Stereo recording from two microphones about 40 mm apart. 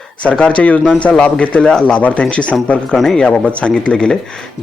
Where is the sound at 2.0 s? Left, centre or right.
Left.